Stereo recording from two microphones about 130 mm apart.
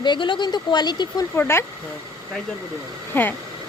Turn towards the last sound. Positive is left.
turn(degrees=15)  # may be behind; listen again after turning